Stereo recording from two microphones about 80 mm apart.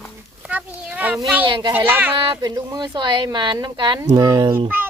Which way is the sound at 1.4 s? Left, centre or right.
Right.